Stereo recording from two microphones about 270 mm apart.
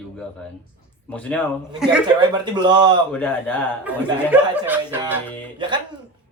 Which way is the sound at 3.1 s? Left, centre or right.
Centre.